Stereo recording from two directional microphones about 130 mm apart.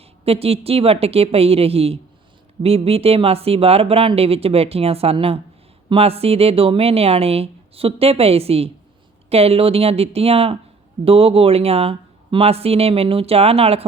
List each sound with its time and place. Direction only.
0.0 s speech: 50° right (ahead or behind)